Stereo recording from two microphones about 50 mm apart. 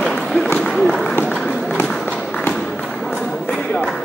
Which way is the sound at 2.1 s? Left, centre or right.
Left.